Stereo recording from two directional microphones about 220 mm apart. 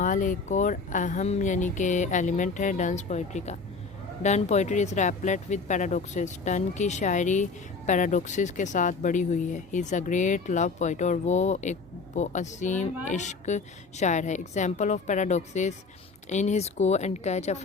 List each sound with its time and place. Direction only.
0.0 s speech: 35° left (ahead or behind)